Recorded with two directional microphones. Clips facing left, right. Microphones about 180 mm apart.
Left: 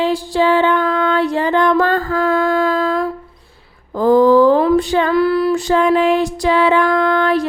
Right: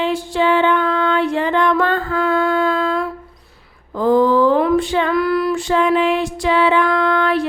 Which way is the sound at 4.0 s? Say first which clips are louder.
Left 3 dB; 40° left (ahead or behind).